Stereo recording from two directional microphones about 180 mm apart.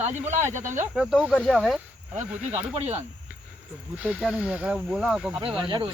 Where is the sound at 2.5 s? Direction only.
35° right (ahead or behind).